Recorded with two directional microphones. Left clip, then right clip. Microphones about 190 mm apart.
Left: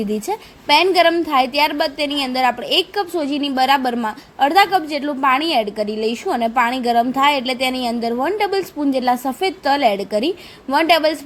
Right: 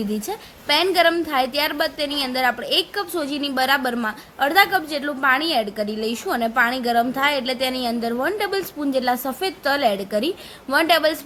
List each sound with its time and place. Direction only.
0.3 s a woman's voice: 15° left (ahead or behind)